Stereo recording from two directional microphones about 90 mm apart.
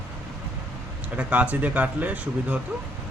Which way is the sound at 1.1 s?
15° right (ahead or behind).